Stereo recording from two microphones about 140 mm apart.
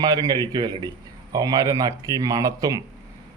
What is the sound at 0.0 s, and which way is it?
A man's voice, 30° right (ahead or behind).